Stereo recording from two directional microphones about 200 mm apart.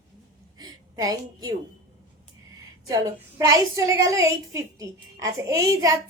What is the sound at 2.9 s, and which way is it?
A woman's voice, 15° right (ahead or behind).